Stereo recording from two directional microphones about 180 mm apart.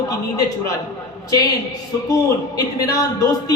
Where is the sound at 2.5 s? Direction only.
20° left (ahead or behind).